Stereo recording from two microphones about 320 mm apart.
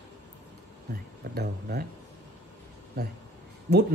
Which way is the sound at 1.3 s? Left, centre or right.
Right.